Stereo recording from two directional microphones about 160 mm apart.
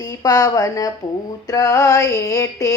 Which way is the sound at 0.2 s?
25° left (ahead or behind).